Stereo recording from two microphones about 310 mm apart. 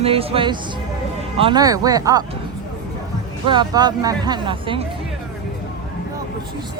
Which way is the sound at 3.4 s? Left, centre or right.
Centre.